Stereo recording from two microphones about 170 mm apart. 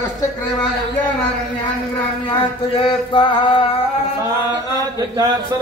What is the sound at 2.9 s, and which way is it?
Mantra, 30° left (ahead or behind).